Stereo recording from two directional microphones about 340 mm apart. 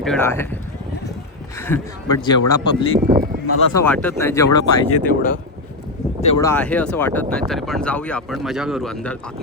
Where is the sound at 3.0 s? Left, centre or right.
Right.